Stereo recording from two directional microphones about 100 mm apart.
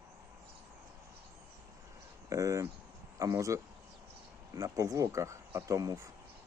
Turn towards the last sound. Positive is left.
turn(degrees=-30)  # may be behind; listen again after turning